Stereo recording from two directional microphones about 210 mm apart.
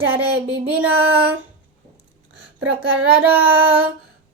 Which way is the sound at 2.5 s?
65° right (ahead or behind).